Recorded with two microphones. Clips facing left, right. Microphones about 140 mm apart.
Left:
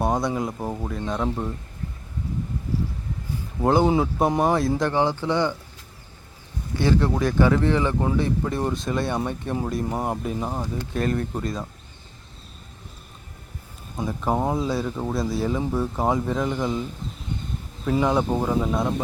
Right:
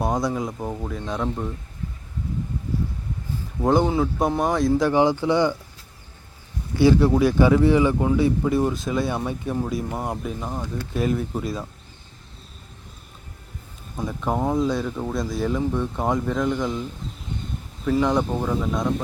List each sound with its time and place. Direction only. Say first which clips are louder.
0.0 s speech: even; centre (ahead or behind)
3.6 s speech: even; 5° left (ahead or behind)
3.8 s speech: left 1 dB; 15° left (ahead or behind)
4.9 s speech: right 4 dB; 10° right (ahead or behind)
6.7 s speech: right 5 dB; 10° right (ahead or behind)
13.9 s speech: left 1 dB; centre (ahead or behind)
18.0 s speech: left 3 dB; 5° left (ahead or behind)